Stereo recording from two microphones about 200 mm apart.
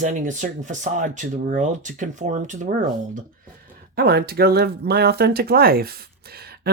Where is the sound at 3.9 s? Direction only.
50° right (ahead or behind).